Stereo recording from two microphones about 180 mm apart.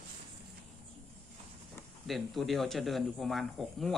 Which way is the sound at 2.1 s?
Centre (ahead or behind).